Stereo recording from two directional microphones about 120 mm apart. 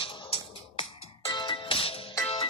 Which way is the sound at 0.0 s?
50° left (ahead or behind).